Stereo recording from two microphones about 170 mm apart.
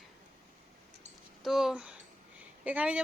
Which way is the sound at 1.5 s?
Centre (ahead or behind).